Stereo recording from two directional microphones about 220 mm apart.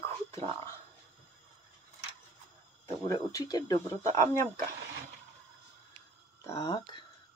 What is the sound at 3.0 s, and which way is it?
Speech, 15° left (ahead or behind).